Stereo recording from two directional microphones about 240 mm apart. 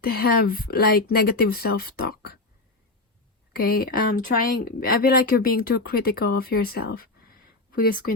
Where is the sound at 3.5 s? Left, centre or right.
Left.